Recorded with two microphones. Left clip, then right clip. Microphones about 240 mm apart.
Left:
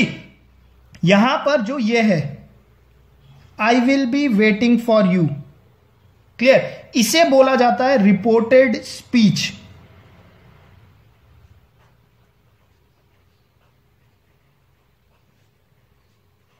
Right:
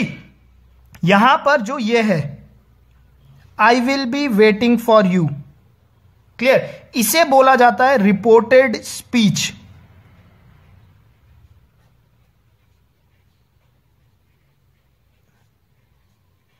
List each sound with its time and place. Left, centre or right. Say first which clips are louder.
0.9 s speech: right 3 dB; right
3.5 s speech: right 2 dB; right
6.3 s speech: left 1 dB; right